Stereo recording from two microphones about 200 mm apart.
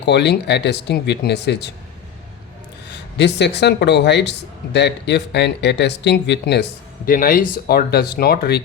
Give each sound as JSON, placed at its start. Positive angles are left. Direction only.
{"t": 0.0, "sound": "a man's voice", "side_deg": 60}
{"t": 2.9, "sound": "a man's voice", "side_deg": 60}